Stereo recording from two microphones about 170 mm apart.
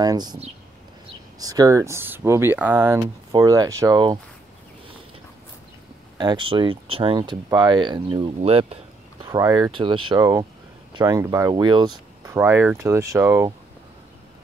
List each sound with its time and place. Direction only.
0.0 s speech: 25° right (ahead or behind)
1.4 s speech: 20° right (ahead or behind)
6.1 s speech: 25° right (ahead or behind)
9.2 s speech: 20° right (ahead or behind)
12.3 s speech: 15° right (ahead or behind)